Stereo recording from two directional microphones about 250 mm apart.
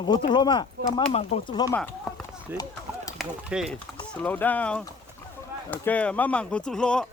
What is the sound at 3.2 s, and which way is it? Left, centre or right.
Speech, centre.